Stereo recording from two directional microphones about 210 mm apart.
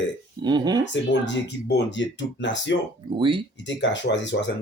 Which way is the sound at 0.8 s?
55° left (ahead or behind).